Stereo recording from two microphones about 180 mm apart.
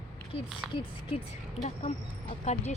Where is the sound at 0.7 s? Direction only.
30° left (ahead or behind).